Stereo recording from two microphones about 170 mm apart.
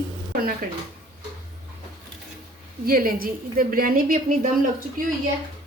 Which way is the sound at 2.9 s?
55° right (ahead or behind).